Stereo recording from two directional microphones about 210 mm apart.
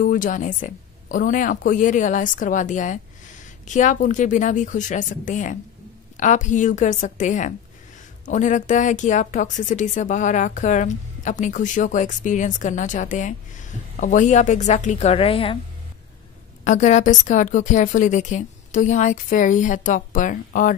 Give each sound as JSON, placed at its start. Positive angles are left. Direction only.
{"t": 0.0, "sound": "speech", "side_deg": 40}
{"t": 16.6, "sound": "speech", "side_deg": 35}